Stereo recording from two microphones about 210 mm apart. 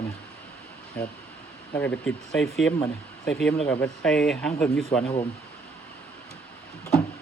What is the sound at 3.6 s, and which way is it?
Speech, 5° left (ahead or behind).